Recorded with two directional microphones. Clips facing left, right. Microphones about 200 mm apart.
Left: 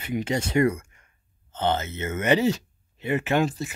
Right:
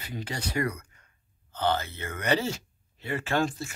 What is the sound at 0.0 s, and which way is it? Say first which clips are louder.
Speech: left 9 dB; 25° left (ahead or behind).